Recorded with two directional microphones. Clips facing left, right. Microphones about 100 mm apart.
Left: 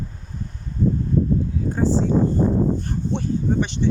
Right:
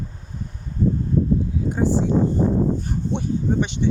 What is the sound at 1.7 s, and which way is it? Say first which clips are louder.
Speech: even; 15° right (ahead or behind).